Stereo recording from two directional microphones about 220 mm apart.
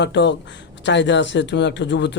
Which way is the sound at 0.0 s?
55° left (ahead or behind).